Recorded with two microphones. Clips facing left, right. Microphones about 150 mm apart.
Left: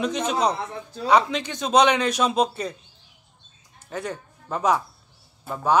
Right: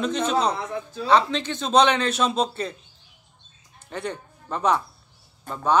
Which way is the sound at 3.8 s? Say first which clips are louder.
Even; 10° left (ahead or behind).